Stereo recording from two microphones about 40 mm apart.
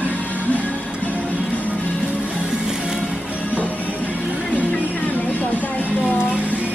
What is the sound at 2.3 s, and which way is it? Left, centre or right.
Music, centre.